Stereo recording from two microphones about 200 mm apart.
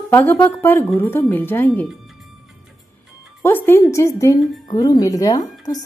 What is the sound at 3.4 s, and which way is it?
A woman's voice, 10° left (ahead or behind).